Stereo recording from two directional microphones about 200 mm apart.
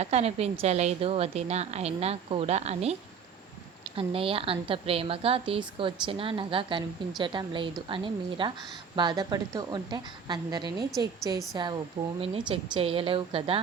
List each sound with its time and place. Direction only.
0.0 s a woman's voice: 30° right (ahead or behind)
3.9 s a woman's voice: 25° right (ahead or behind)